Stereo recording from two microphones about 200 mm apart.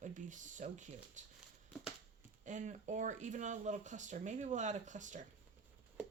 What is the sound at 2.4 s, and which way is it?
Speech, 40° right (ahead or behind).